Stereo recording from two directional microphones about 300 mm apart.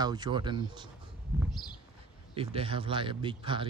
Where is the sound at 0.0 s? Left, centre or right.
Centre.